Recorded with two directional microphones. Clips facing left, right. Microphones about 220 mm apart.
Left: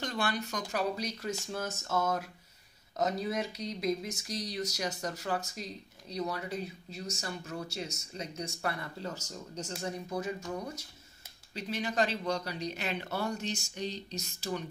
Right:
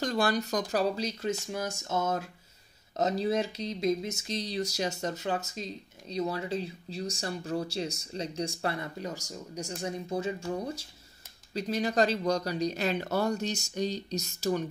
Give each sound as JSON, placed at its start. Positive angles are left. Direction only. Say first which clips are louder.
{"t": 0.0, "sound": "speech", "louder": "right 6 dB", "side_deg": -40}
{"t": 1.5, "sound": "a sound", "louder": "right 2 dB", "side_deg": -15}
{"t": 3.0, "sound": "speech", "louder": "right 4 dB", "side_deg": -30}